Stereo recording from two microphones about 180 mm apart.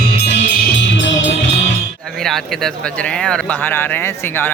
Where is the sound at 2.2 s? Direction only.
Centre (ahead or behind).